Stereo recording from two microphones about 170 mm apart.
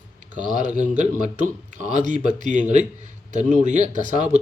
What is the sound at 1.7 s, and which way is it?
Speech, 45° right (ahead or behind).